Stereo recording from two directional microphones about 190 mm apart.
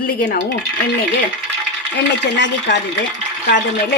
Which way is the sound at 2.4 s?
70° left (ahead or behind).